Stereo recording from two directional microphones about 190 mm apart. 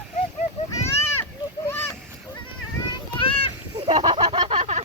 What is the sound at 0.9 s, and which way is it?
Splash, 15° left (ahead or behind).